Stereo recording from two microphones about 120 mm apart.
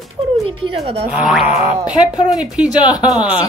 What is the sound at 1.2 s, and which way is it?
Speech, 5° right (ahead or behind).